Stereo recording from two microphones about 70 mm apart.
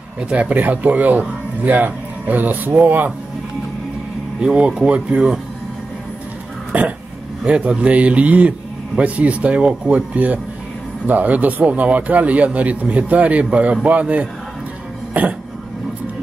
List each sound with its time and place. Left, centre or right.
0.2 s a man's voice: centre
4.4 s speech: centre
6.7 s a man's voice: centre